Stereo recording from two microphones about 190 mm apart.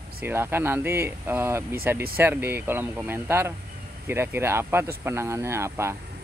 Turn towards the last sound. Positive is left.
turn(degrees=-15)  # may be behind; listen again after turning